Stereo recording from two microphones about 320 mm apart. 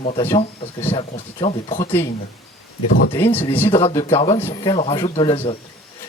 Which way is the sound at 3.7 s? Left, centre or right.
Centre.